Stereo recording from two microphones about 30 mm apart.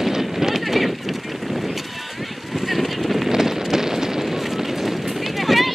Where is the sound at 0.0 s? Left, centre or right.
Centre.